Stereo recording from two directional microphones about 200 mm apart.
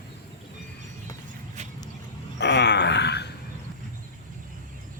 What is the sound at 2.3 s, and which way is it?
Groan, 60° left (ahead or behind).